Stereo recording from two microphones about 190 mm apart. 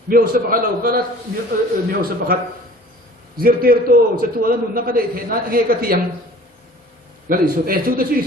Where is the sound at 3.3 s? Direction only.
50° right (ahead or behind).